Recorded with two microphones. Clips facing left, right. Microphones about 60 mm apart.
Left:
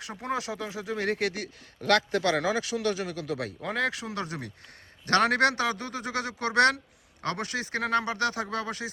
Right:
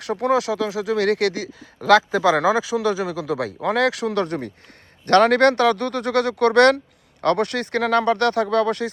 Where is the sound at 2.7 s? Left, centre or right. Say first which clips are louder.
Right 8 dB; right.